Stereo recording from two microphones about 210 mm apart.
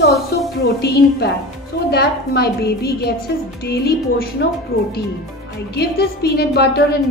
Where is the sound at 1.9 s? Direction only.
50° left (ahead or behind).